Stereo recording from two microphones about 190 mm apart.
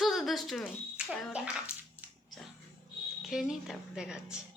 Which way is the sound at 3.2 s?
Centre (ahead or behind).